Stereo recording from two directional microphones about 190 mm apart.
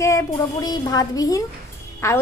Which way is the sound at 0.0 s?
20° left (ahead or behind).